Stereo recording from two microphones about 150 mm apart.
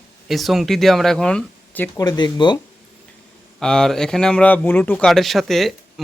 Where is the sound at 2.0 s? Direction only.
30° left (ahead or behind).